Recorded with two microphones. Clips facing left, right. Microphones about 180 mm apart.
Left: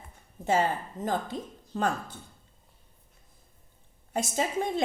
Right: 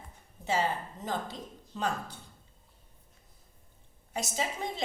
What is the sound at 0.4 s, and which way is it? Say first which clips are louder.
A woman's voice: left 4 dB; 50° left (ahead or behind).